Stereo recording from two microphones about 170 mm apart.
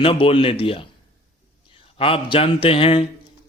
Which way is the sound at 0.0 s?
35° left (ahead or behind).